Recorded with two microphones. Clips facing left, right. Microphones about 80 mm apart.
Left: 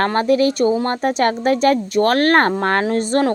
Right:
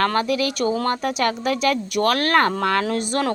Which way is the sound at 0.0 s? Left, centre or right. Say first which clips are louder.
Left 5 dB; left.